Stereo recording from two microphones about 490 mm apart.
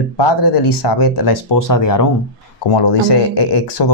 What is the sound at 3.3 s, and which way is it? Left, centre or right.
Speech, left.